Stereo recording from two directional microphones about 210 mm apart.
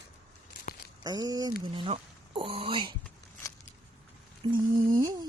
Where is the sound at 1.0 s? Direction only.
20° right (ahead or behind).